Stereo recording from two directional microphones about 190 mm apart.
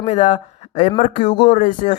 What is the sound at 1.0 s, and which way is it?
Speech, 45° left (ahead or behind).